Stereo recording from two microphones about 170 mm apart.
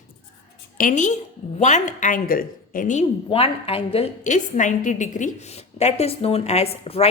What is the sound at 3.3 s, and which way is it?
A woman's voice, 35° left (ahead or behind).